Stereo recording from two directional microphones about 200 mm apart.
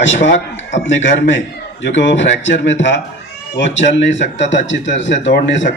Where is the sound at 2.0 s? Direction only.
65° left (ahead or behind).